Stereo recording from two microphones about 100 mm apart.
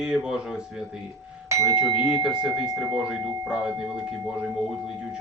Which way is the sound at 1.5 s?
35° right (ahead or behind).